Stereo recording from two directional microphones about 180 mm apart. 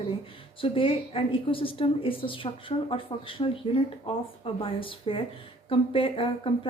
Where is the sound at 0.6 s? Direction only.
30° left (ahead or behind).